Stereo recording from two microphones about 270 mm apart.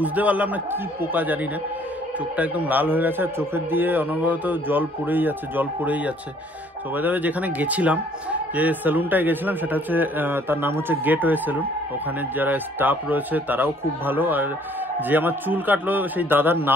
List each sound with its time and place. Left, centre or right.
0.0 s a man's voice: centre